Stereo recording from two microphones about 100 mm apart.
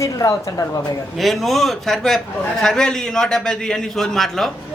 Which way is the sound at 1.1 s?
Centre (ahead or behind).